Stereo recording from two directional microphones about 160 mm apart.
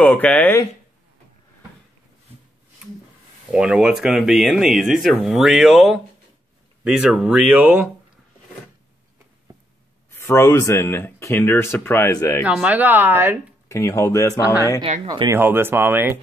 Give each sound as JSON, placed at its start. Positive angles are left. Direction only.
{"t": 0.0, "sound": "speech", "side_deg": 10}
{"t": 3.5, "sound": "speech", "side_deg": -5}
{"t": 10.1, "sound": "speech", "side_deg": 15}
{"t": 12.4, "sound": "speech", "side_deg": -10}
{"t": 13.7, "sound": "speech", "side_deg": 15}
{"t": 15.0, "sound": "speech", "side_deg": -25}
{"t": 15.3, "sound": "speech", "side_deg": -15}